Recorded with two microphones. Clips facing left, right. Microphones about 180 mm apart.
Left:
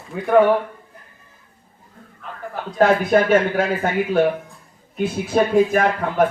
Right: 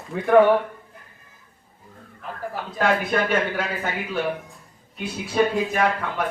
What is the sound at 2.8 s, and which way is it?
Speech, 45° left (ahead or behind).